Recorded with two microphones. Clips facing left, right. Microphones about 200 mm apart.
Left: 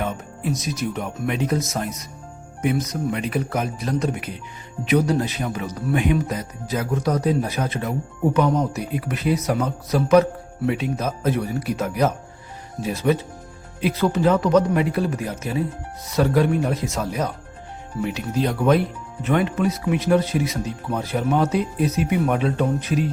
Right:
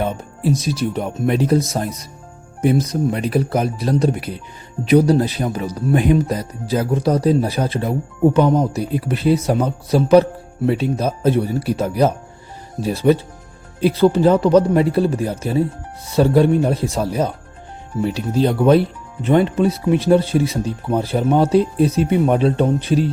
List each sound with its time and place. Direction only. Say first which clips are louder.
0.0 s speech: right 5 dB; 30° right (ahead or behind)